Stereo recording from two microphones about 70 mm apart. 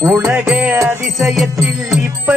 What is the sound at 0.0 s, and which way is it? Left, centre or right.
Music, right.